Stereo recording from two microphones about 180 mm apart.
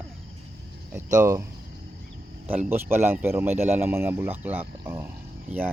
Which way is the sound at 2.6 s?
10° right (ahead or behind).